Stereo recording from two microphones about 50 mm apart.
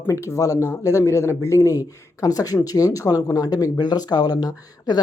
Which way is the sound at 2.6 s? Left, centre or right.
Left.